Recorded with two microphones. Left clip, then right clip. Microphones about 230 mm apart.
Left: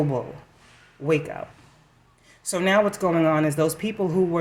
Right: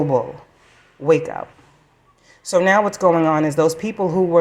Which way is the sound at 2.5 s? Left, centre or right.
Centre.